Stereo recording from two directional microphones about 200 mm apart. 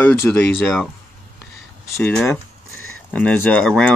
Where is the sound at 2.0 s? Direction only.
5° left (ahead or behind).